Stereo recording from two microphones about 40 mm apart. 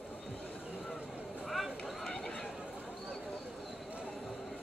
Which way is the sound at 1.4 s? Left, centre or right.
Centre.